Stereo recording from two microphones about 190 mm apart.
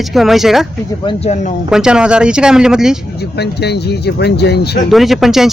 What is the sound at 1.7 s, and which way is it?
Speech, 5° right (ahead or behind).